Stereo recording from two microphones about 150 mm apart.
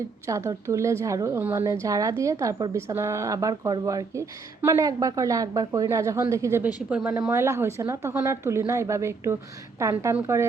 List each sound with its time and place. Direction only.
0.3 s a woman's voice: 20° right (ahead or behind)
6.9 s speech: 5° right (ahead or behind)
7.2 s a woman's voice: 15° right (ahead or behind)